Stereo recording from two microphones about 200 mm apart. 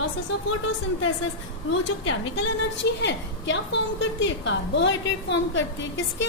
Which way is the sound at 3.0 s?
65° left (ahead or behind).